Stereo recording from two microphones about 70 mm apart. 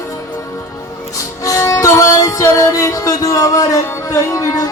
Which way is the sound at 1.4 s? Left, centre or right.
Left.